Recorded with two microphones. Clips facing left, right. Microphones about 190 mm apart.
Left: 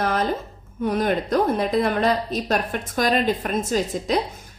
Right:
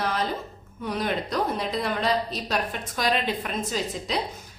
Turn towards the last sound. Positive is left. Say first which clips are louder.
# left 7 dB
turn(degrees=50)  # may be behind; listen again after turning